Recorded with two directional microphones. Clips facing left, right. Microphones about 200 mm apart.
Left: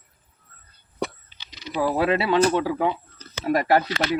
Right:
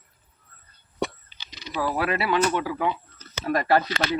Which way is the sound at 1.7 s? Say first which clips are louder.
Left 4 dB; 25° left (ahead or behind).